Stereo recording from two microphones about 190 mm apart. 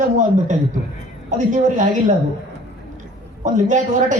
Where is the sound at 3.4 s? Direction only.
40° right (ahead or behind).